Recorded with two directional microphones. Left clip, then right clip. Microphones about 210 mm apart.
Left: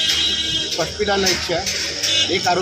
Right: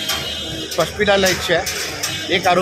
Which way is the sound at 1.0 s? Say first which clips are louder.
Right 4 dB; 20° right (ahead or behind).